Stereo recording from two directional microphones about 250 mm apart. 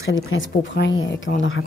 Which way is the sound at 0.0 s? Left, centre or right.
Left.